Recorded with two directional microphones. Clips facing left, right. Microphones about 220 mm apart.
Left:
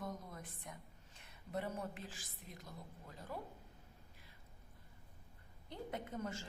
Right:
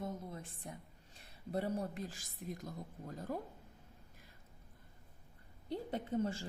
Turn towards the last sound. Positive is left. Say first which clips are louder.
# right 7 dB
turn(degrees=-30)  # may be behind; listen again after turning